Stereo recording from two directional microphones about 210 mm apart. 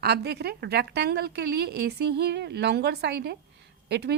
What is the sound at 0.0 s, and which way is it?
A woman's voice, 50° right (ahead or behind).